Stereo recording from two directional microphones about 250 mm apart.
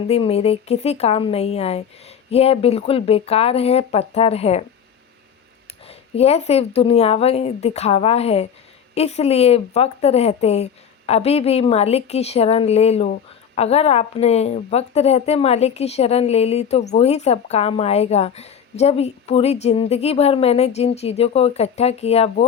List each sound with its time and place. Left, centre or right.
0.1 s a woman's voice: left
5.9 s a woman's voice: left